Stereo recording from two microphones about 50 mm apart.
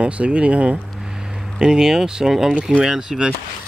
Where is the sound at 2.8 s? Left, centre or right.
Centre.